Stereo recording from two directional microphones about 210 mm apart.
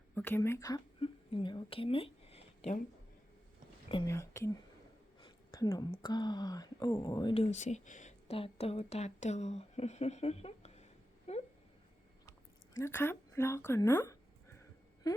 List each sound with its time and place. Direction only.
0.1 s speech: 10° left (ahead or behind); by 2.8 s 30° left (ahead or behind)
3.8 s a woman's voice: 20° left (ahead or behind)
7.5 s speech: 35° left (ahead or behind)
11.3 s a sound: 30° left (ahead or behind)
12.7 s a woman's voice: 10° left (ahead or behind)
15.1 s a sound: 15° left (ahead or behind)